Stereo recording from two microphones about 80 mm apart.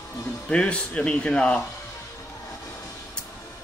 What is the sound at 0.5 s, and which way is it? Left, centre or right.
Speech, centre.